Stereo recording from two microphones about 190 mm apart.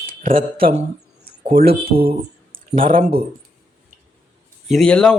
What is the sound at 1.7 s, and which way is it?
Speech, 30° right (ahead or behind).